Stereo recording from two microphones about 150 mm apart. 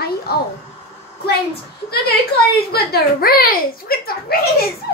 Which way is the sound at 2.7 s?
85° left.